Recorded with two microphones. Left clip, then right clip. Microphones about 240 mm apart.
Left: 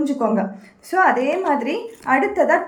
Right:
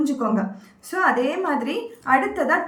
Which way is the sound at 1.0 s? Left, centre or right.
Centre.